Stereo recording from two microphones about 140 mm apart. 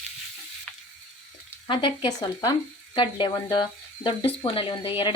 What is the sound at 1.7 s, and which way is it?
Speech, 35° left (ahead or behind).